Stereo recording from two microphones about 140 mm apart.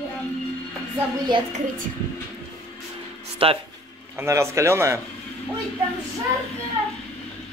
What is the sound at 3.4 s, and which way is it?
Speech, 40° right (ahead or behind).